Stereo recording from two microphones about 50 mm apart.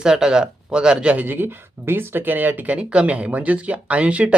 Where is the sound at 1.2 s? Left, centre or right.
Right.